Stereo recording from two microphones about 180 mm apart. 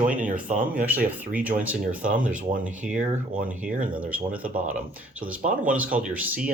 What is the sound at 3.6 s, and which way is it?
Speech, 5° right (ahead or behind).